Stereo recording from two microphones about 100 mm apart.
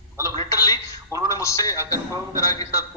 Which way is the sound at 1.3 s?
35° left (ahead or behind).